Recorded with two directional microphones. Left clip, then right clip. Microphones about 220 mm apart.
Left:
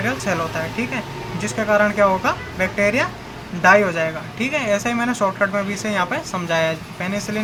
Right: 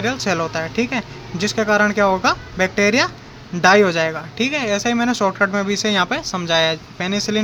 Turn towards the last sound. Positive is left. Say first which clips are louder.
# right 4 dB
turn(degrees=-50)  # may be behind; listen again after turning